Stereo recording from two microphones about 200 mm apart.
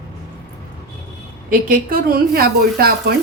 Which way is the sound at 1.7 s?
45° right (ahead or behind).